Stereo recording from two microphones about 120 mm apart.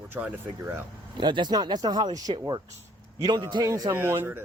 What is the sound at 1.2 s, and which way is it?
Speech, 40° right (ahead or behind).